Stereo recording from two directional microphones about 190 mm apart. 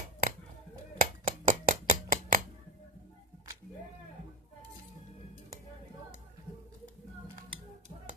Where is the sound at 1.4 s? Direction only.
45° right (ahead or behind).